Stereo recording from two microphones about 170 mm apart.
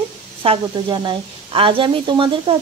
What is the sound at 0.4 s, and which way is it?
A woman's voice, 30° right (ahead or behind).